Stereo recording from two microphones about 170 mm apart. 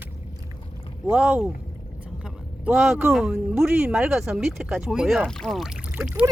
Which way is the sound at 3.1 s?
Centre (ahead or behind).